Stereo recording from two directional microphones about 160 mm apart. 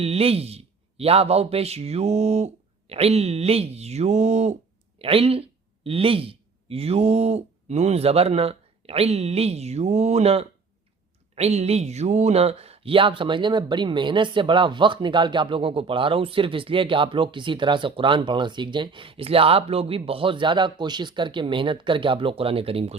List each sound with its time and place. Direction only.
0.0 s speech: 40° right (ahead or behind)